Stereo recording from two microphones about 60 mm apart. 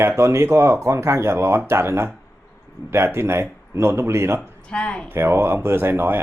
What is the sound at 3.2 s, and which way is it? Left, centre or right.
Speech, right.